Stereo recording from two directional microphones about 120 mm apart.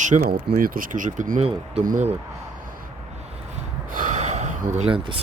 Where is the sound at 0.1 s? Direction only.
45° right (ahead or behind).